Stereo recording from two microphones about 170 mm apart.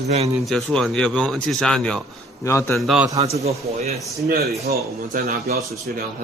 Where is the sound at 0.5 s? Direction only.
Centre (ahead or behind).